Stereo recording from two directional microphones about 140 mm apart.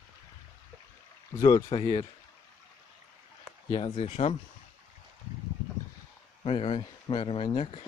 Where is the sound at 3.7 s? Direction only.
40° left (ahead or behind).